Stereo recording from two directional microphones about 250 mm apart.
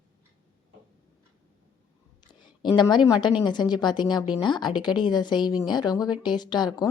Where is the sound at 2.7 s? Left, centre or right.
Centre.